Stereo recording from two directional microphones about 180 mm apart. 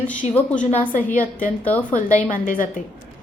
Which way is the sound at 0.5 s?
50° left (ahead or behind).